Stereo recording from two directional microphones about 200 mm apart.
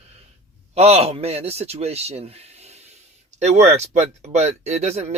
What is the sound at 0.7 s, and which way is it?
Speech, 30° right (ahead or behind).